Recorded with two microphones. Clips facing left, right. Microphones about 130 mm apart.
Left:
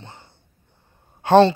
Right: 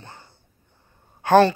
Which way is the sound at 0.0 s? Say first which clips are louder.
Left 1 dB; 25° left (ahead or behind).